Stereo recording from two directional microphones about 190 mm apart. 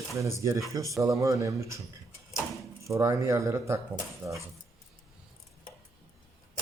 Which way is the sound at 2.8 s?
15° right (ahead or behind).